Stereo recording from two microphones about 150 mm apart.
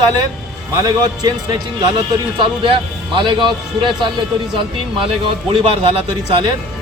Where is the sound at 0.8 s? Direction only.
25° right (ahead or behind).